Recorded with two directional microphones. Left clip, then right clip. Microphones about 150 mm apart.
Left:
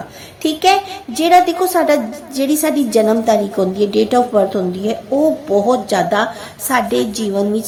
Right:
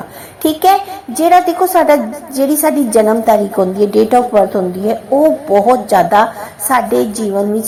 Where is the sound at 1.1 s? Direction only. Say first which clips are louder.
Right 2 dB; 15° left (ahead or behind).